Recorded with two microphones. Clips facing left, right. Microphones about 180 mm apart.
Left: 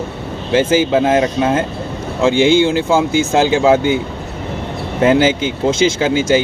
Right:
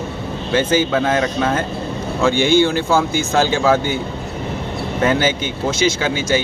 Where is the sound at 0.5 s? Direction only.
20° left (ahead or behind).